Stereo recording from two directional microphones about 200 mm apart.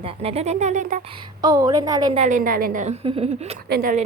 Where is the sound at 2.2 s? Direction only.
40° right (ahead or behind).